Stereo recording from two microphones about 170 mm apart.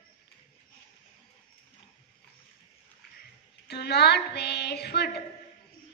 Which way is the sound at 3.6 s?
70° left (ahead or behind).